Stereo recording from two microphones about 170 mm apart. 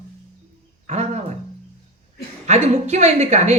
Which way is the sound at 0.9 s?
40° right (ahead or behind).